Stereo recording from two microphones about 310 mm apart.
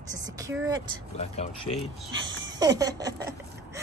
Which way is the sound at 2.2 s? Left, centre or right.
Right.